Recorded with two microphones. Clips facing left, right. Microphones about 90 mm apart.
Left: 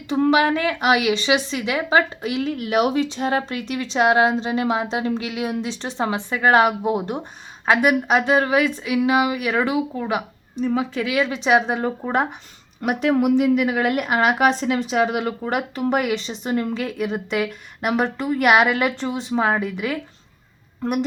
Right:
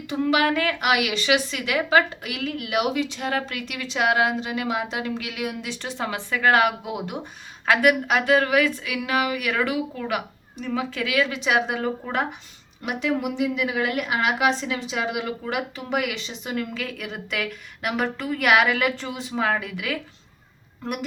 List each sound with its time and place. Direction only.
0.3 s a woman's voice: 25° left (ahead or behind)
7.6 s a woman's voice: 20° left (ahead or behind)
12.8 s speech: 50° left (ahead or behind); by 20.0 s 30° left (ahead or behind)